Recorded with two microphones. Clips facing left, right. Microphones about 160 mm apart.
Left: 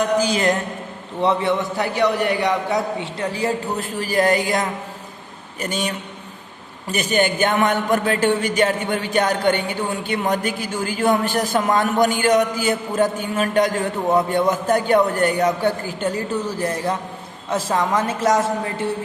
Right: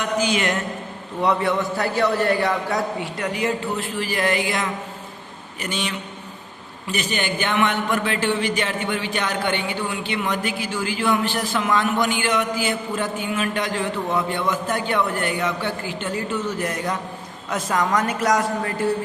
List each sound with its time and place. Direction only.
0.2 s a man's voice: 35° left (ahead or behind)
1.2 s a man's voice: 25° left (ahead or behind)